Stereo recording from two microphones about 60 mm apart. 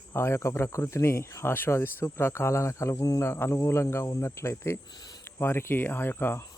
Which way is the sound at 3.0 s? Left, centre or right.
Left.